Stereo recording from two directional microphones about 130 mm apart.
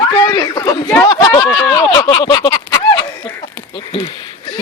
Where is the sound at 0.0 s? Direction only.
30° left (ahead or behind).